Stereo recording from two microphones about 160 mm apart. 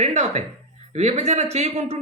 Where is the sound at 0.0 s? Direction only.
45° right (ahead or behind).